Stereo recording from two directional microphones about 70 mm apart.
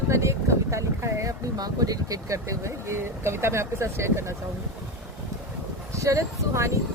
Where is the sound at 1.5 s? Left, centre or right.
Right.